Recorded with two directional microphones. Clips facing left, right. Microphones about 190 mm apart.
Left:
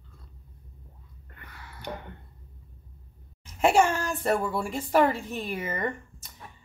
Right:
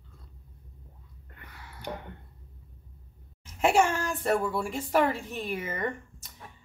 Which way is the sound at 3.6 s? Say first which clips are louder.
Left 2 dB; 35° left (ahead or behind).